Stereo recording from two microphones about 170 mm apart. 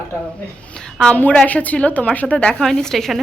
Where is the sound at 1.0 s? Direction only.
10° left (ahead or behind).